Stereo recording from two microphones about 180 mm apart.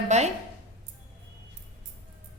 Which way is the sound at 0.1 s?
40° right (ahead or behind).